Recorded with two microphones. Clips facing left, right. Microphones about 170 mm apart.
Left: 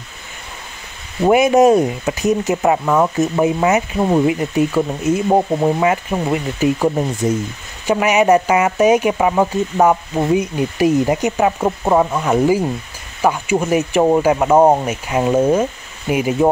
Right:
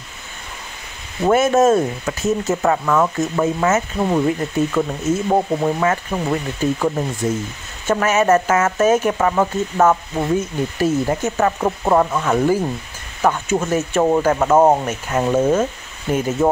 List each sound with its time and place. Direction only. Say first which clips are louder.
1.2 s speech: left 3 dB; 15° left (ahead or behind)